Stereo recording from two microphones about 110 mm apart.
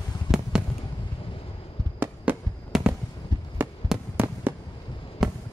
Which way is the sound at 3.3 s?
40° right (ahead or behind).